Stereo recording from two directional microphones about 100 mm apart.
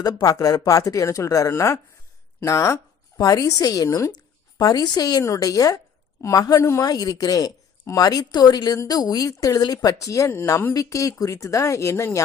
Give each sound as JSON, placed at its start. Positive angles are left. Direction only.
{"t": 0.0, "sound": "a woman's voice", "side_deg": 40}